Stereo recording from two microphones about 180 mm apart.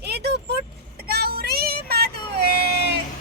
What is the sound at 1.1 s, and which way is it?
Child singing, 60° right (ahead or behind).